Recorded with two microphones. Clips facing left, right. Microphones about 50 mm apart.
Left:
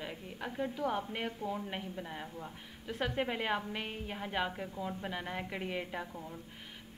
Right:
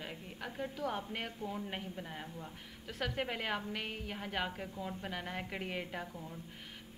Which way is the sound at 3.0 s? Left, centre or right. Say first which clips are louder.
Left 3 dB; left.